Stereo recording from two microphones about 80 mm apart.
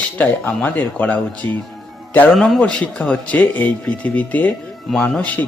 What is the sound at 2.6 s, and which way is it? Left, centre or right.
Speech, centre.